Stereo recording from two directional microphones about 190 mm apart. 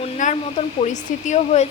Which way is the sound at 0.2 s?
40° left (ahead or behind).